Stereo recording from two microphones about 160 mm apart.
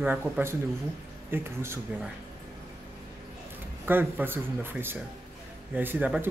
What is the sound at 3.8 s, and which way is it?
Speech, 10° right (ahead or behind).